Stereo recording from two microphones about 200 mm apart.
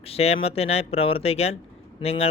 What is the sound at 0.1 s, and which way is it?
Speech, 30° left (ahead or behind).